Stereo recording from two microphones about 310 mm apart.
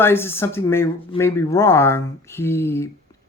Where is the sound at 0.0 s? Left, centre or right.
Centre.